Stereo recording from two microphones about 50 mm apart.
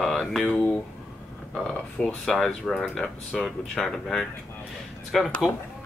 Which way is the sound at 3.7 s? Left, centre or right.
Centre.